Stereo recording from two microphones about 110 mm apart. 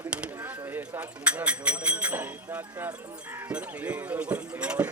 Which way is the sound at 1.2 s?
10° right (ahead or behind).